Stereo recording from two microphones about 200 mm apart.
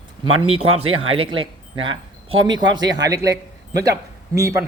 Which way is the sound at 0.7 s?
90° right.